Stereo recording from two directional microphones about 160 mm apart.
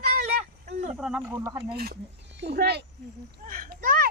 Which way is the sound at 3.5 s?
60° right (ahead or behind).